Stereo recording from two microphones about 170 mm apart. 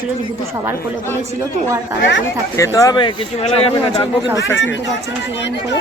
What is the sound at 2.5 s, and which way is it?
Speech, 20° left (ahead or behind).